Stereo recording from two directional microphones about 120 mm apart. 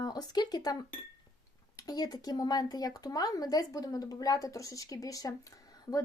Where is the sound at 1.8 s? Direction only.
30° left (ahead or behind).